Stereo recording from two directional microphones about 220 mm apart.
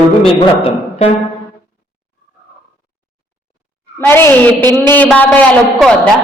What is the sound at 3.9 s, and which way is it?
A man's voice, 10° left (ahead or behind).